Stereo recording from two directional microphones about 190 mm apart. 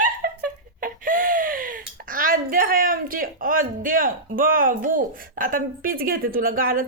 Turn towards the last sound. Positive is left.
turn(degrees=-50)  # may be behind; listen again after turning